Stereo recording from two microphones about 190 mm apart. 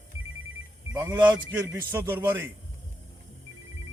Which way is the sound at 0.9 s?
10° right (ahead or behind).